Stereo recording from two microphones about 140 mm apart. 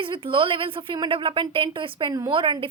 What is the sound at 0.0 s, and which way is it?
A woman's voice, 40° right (ahead or behind).